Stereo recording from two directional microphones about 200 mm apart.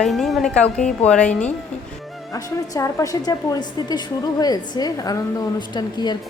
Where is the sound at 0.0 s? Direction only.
Centre (ahead or behind).